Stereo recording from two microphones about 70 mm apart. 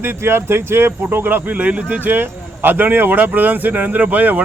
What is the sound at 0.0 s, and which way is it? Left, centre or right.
Speech, right.